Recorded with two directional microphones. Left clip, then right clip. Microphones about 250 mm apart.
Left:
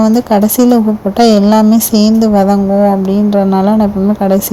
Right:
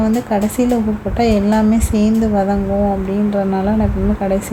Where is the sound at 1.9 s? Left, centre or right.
Centre.